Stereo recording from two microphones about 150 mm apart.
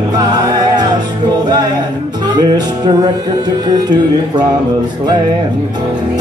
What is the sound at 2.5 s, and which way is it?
Music, 30° right (ahead or behind).